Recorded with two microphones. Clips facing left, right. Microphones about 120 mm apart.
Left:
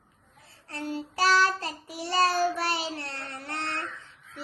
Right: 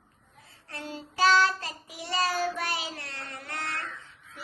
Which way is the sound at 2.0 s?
30° left (ahead or behind).